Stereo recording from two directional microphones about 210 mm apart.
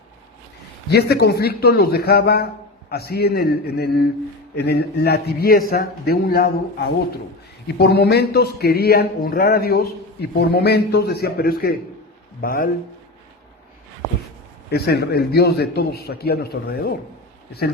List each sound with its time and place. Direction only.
0.9 s speech: 50° left (ahead or behind)
14.7 s speech: 50° left (ahead or behind)